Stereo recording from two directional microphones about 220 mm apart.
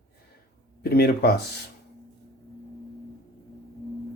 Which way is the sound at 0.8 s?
45° left (ahead or behind).